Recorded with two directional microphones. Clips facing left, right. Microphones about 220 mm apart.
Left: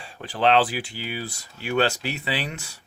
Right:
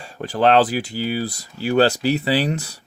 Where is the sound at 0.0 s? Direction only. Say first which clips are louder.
Right 5 dB; 45° right (ahead or behind).